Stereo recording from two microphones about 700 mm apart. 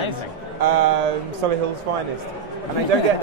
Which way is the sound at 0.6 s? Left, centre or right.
Right.